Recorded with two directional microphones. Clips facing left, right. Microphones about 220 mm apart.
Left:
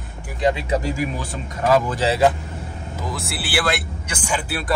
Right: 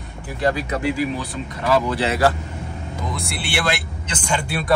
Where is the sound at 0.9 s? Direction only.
45° left (ahead or behind).